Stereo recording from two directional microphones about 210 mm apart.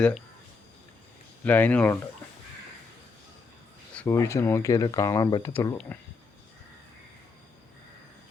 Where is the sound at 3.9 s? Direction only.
10° left (ahead or behind).